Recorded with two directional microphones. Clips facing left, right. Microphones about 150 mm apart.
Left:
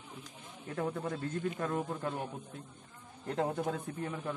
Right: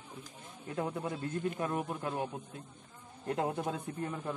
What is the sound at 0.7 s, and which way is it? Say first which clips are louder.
A man's voice: even; 15° right (ahead or behind).